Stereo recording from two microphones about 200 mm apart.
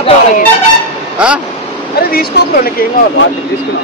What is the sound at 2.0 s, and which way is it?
Speech, 50° left (ahead or behind).